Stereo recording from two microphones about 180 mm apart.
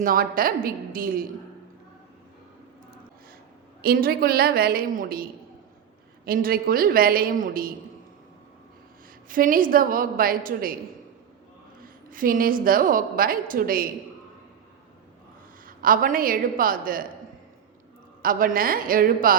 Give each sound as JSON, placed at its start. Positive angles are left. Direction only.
{"t": 0.0, "sound": "a woman's voice", "side_deg": -55}
{"t": 3.8, "sound": "a woman's voice", "side_deg": -60}
{"t": 6.2, "sound": "a woman's voice", "side_deg": -55}
{"t": 9.3, "sound": "a woman's voice", "side_deg": -50}
{"t": 11.8, "sound": "a woman's voice", "side_deg": -50}
{"t": 15.6, "sound": "a woman's voice", "side_deg": -50}
{"t": 18.2, "sound": "a woman's voice", "side_deg": -50}